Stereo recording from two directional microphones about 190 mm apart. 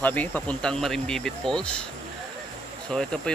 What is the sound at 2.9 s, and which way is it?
Speech, 5° left (ahead or behind).